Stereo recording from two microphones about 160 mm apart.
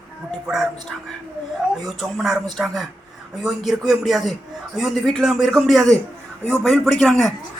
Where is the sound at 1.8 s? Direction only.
Centre (ahead or behind).